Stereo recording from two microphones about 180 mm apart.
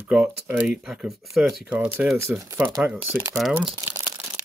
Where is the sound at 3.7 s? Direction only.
15° right (ahead or behind).